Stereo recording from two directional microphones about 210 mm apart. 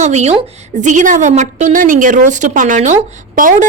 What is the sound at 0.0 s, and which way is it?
A woman's voice, 35° right (ahead or behind).